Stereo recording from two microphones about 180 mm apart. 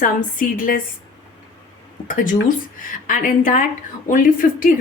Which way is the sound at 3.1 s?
50° left (ahead or behind).